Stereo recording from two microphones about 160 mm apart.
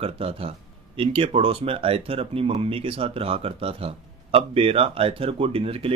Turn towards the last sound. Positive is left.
turn(degrees=-35)  # may be behind; listen again after turning